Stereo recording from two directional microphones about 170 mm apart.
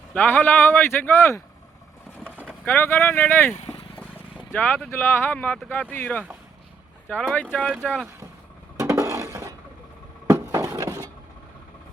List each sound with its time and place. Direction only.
0.1 s speech: 10° left (ahead or behind)
2.2 s vehicle: 5° right (ahead or behind)
2.6 s speech: 10° left (ahead or behind)
3.5 s vehicle: 40° left (ahead or behind)
4.5 s speech: 10° left (ahead or behind)
8.8 s a sound: 15° right (ahead or behind)